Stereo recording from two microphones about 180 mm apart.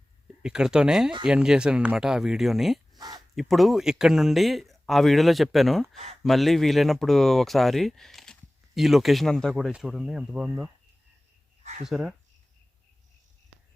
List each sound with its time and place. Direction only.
0.4 s speech: 5° right (ahead or behind)
11.9 s speech: centre (ahead or behind)